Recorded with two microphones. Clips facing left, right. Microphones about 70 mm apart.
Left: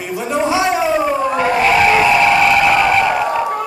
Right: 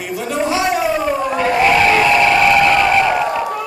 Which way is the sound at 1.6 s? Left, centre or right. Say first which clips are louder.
Even; centre.